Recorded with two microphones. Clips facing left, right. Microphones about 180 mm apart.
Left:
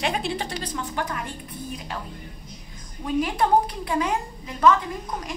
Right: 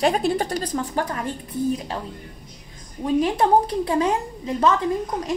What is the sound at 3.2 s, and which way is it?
A woman's voice, 30° right (ahead or behind).